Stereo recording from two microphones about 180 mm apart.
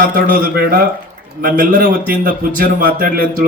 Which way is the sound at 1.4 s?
55° right (ahead or behind).